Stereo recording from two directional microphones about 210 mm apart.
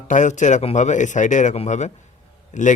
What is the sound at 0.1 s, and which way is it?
Speech, 35° left (ahead or behind).